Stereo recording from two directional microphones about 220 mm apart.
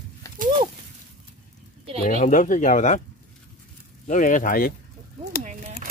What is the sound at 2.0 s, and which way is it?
Speech, 35° left (ahead or behind).